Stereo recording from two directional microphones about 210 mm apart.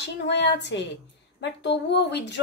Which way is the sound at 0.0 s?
55° left (ahead or behind).